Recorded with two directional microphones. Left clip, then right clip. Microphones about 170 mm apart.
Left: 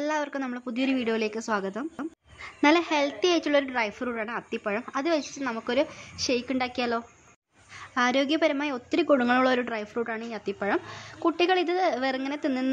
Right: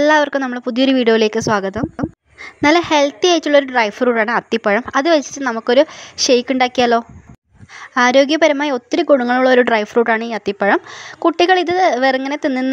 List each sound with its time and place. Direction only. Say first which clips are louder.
0.0 s a woman's voice: right 16 dB; 45° right (ahead or behind)